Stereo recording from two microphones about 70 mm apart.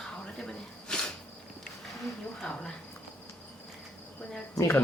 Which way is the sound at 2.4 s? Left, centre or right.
Centre.